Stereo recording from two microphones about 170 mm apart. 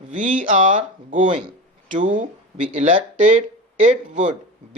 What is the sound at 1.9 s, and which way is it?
Speech, 50° right (ahead or behind).